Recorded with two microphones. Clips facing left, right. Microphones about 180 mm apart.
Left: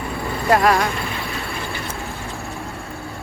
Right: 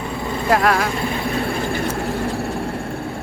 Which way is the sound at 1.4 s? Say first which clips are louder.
Right 7 dB; 50° right (ahead or behind).